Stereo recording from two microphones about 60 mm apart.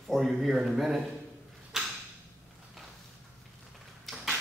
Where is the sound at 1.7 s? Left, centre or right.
Centre.